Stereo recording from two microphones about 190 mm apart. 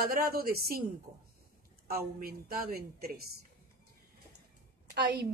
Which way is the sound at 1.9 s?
50° right (ahead or behind).